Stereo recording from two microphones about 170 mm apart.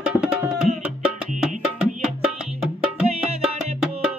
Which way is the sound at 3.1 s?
35° right (ahead or behind).